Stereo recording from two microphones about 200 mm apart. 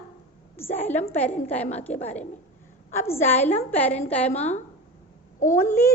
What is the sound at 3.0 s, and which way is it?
Speech, 10° left (ahead or behind).